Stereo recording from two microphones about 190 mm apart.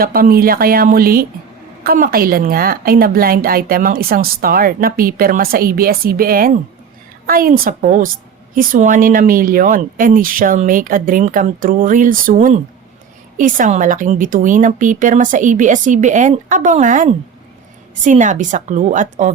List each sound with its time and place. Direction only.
0.0 s a woman's voice: 50° right (ahead or behind)